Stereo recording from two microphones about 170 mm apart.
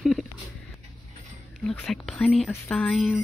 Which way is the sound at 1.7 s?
Centre (ahead or behind).